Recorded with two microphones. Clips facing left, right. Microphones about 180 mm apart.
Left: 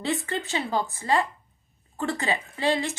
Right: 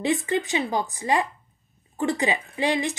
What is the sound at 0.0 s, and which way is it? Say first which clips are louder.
A woman's voice: right 5 dB; 15° right (ahead or behind).